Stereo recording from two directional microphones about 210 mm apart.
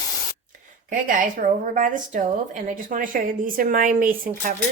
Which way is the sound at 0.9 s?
40° right (ahead or behind).